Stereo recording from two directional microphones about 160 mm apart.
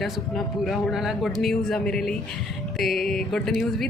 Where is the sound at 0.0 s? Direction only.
Centre (ahead or behind).